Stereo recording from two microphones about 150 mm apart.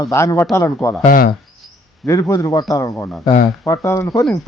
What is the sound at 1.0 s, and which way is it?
Speech, 65° left (ahead or behind).